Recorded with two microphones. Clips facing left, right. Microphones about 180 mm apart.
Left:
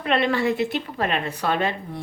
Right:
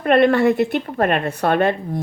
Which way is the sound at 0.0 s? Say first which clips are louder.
Right 8 dB; 50° right (ahead or behind).